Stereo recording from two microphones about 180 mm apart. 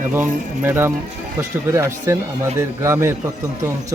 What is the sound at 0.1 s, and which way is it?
Speech, 10° right (ahead or behind).